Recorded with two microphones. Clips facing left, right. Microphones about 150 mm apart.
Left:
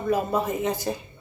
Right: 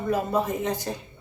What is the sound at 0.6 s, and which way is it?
Speech, 5° left (ahead or behind).